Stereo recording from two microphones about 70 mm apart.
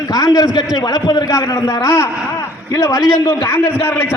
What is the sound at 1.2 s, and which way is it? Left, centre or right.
A man's voice, left.